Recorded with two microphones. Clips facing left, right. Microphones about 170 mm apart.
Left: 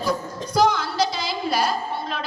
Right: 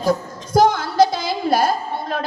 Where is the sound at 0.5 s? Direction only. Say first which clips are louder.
Right 6 dB; 50° right (ahead or behind).